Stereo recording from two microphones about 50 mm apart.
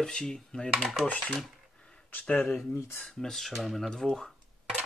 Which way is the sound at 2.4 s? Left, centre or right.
Centre.